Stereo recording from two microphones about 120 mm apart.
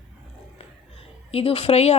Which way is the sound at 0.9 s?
55° left (ahead or behind).